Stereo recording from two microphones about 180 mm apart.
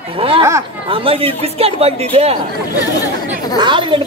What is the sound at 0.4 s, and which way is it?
Speech, 15° right (ahead or behind).